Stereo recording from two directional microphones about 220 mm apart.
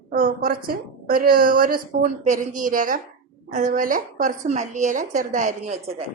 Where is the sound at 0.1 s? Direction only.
40° right (ahead or behind).